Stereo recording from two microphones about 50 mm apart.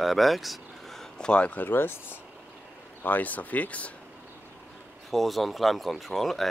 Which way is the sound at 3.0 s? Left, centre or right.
Left.